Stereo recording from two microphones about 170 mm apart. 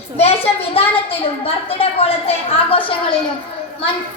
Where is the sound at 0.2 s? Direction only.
35° left (ahead or behind).